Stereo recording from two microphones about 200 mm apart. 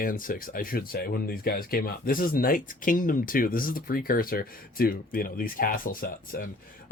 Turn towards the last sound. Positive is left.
turn(degrees=45)  # may be behind; listen again after turning